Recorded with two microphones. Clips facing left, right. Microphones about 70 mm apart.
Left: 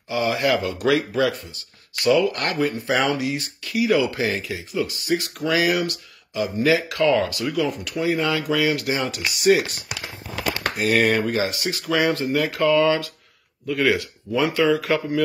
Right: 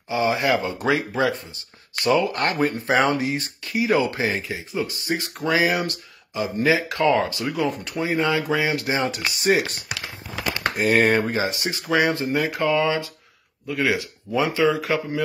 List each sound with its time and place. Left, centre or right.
0.1 s speech: right